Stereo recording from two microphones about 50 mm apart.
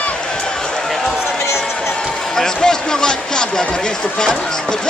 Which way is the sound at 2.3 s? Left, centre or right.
Centre.